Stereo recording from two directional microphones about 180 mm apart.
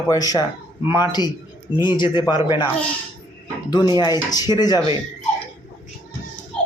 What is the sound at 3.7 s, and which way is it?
Speech, 25° left (ahead or behind).